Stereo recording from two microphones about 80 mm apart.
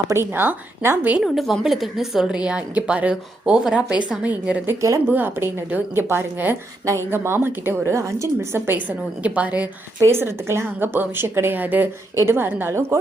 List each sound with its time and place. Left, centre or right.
0.1 s a woman's voice: right
1.2 s a woman's voice: centre
10.0 s a woman's voice: right